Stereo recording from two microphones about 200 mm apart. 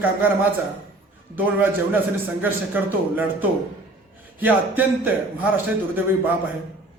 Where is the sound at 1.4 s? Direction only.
10° right (ahead or behind).